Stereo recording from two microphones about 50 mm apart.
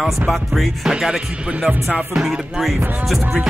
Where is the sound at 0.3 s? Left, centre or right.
Centre.